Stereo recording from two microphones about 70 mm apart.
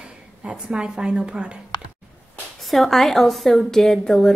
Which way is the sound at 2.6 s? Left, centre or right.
Centre.